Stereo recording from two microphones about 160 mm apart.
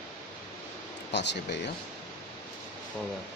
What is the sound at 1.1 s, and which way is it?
Speech, 90° left.